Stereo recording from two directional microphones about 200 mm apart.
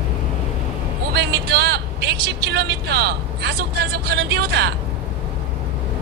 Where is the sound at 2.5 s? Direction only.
55° right (ahead or behind).